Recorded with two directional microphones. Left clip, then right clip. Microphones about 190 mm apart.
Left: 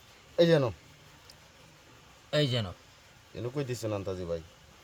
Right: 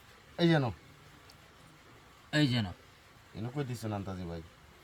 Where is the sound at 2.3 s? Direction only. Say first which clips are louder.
Left 2 dB; 45° left (ahead or behind).